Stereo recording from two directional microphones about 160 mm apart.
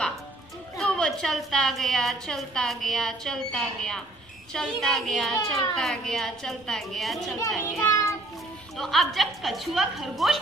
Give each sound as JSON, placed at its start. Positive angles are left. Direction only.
{"t": 0.7, "sound": "a woman's voice", "side_deg": 5}
{"t": 7.6, "sound": "a child's voice", "side_deg": 20}
{"t": 8.7, "sound": "a woman's voice", "side_deg": 0}